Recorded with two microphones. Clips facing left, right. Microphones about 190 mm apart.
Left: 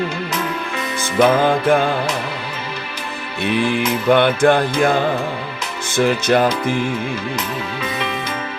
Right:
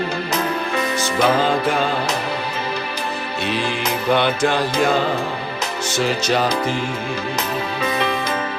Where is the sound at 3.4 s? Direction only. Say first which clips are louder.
Left 6 dB; 55° left (ahead or behind).